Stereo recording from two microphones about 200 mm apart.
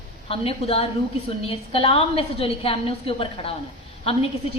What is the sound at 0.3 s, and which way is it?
A woman's voice, 30° left (ahead or behind).